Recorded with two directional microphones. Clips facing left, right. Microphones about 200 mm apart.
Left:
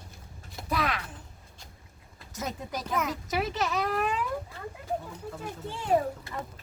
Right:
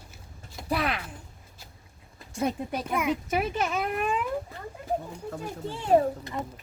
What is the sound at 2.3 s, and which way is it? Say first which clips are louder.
Speech: right 6 dB; 30° right (ahead or behind).